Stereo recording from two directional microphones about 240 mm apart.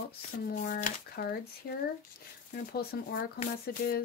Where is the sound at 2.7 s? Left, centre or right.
Left.